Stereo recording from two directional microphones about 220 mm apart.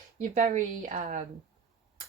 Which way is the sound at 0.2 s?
35° right (ahead or behind).